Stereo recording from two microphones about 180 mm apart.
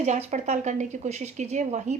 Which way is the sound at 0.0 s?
40° right (ahead or behind).